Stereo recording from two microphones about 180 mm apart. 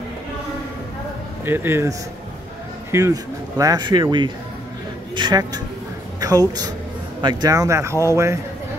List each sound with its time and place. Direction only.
1.4 s speech: 15° right (ahead or behind)
6.1 s a sound: 20° right (ahead or behind)
7.2 s speech: 25° right (ahead or behind)